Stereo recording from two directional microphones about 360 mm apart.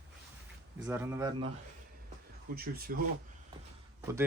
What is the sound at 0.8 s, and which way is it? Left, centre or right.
Speech, centre.